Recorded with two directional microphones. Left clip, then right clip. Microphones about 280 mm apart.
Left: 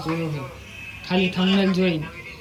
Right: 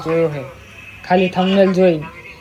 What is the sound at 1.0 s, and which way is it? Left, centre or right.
Speech, centre.